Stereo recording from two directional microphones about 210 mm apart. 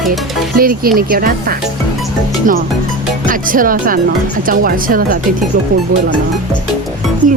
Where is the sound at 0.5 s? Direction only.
45° right (ahead or behind).